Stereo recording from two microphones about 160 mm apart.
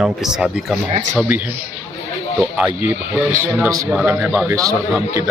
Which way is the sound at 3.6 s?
20° right (ahead or behind).